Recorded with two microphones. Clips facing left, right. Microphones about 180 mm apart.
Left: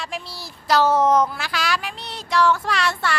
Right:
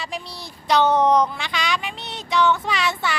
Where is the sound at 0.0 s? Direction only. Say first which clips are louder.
Even; centre (ahead or behind).